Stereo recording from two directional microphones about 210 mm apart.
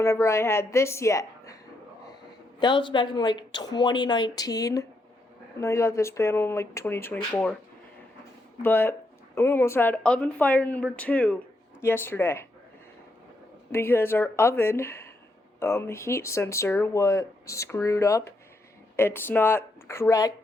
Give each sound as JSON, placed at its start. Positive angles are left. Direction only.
{"t": 0.0, "sound": "speech", "side_deg": 15}
{"t": 2.6, "sound": "speech", "side_deg": 20}
{"t": 8.6, "sound": "speech", "side_deg": 10}
{"t": 13.7, "sound": "speech", "side_deg": 10}